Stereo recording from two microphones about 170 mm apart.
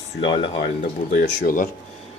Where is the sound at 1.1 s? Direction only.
55° left (ahead or behind).